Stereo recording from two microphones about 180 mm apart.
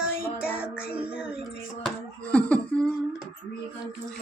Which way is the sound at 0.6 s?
5° right (ahead or behind).